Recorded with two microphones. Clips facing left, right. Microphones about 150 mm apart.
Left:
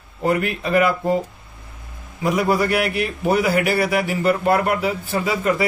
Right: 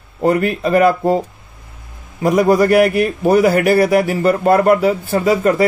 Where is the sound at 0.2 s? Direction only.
40° right (ahead or behind).